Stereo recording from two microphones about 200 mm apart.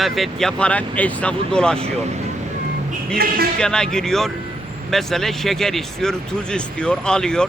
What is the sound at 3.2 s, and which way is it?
Speech, 50° right (ahead or behind).